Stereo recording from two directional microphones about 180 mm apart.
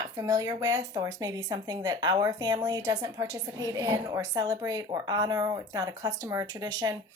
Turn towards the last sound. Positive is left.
turn(degrees=-20)  # may be behind; listen again after turning